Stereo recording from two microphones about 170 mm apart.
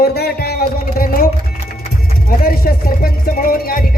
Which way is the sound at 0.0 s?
65° left (ahead or behind).